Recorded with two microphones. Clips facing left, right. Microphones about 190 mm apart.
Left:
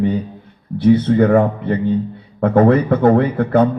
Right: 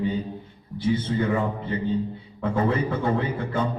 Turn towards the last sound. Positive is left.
turn(degrees=60)  # may be behind; listen again after turning